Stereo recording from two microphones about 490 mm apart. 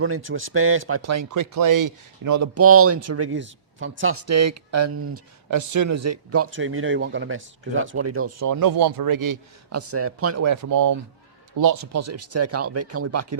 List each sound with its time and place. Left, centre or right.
0.0 s speech: right